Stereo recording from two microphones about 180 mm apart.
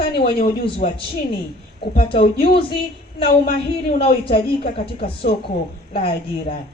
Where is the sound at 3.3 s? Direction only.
60° left (ahead or behind).